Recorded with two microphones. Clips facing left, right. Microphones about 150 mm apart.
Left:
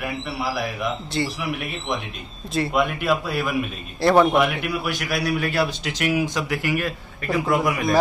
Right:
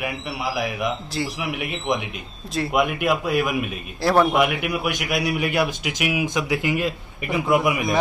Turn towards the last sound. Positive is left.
turn(degrees=-15)  # may be behind; listen again after turning